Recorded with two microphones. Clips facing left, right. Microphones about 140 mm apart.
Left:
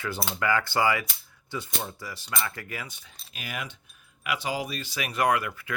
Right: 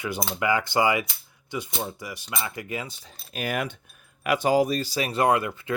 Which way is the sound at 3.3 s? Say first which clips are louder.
Right 9 dB; 50° right (ahead or behind).